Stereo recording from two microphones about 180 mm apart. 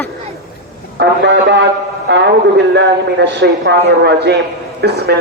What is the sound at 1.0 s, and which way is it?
A man's voice, 70° right (ahead or behind).